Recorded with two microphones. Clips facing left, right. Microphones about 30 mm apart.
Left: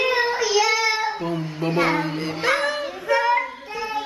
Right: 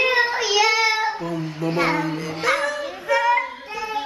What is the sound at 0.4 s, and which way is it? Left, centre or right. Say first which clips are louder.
Child singing: right 1 dB; centre.